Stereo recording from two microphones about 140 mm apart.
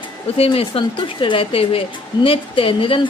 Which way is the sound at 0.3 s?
45° left (ahead or behind).